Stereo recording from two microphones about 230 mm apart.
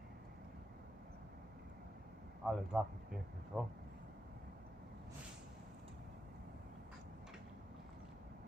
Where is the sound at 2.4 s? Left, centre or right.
Centre.